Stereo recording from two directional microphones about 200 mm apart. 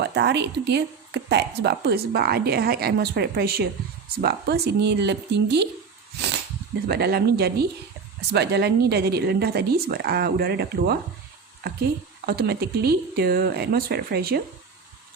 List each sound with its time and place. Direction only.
0.0 s speech: 60° right (ahead or behind)
6.8 s speech: 55° right (ahead or behind)
12.2 s speech: 50° right (ahead or behind)